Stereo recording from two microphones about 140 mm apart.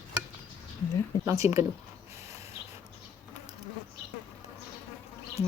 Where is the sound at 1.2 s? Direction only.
20° right (ahead or behind).